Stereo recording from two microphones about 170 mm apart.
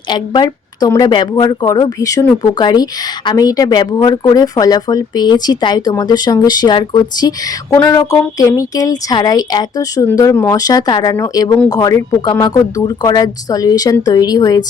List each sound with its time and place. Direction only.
0.1 s a woman's voice: 25° left (ahead or behind)